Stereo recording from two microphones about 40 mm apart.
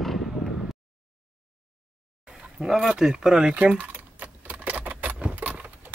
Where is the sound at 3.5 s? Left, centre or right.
Right.